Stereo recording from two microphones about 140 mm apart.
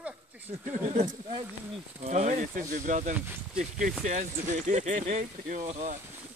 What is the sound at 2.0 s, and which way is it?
Speech, 55° right (ahead or behind).